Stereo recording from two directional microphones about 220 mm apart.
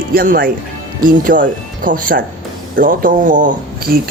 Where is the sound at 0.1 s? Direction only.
40° right (ahead or behind).